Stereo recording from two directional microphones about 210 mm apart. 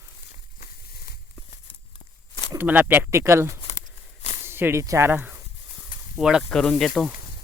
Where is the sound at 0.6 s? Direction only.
45° left (ahead or behind).